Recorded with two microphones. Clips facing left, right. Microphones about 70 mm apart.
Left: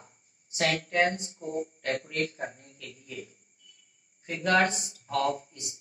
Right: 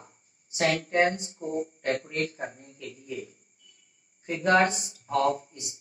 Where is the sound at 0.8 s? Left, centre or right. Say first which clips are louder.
Right 2 dB; right.